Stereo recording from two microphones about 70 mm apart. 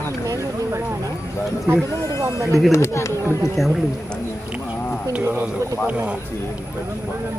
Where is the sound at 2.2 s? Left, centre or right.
Right.